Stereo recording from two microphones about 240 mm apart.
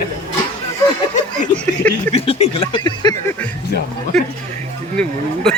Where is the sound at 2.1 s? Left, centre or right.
Left.